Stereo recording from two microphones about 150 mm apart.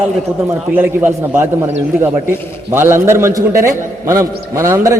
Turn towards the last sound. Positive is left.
turn(degrees=-20)  # may be behind; listen again after turning